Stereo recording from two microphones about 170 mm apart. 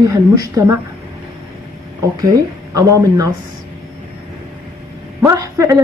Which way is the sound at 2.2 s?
20° right (ahead or behind).